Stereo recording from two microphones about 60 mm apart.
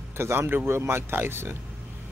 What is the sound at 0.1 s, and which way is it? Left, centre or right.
Speech, right.